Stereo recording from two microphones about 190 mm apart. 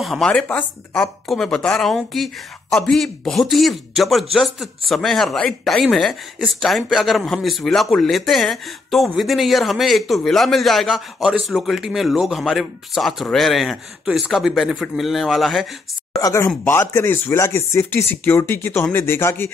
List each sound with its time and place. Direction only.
0.0 s speech: centre (ahead or behind)
16.2 s speech: 15° left (ahead or behind)